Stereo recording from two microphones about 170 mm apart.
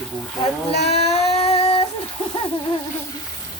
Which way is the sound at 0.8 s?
40° left (ahead or behind).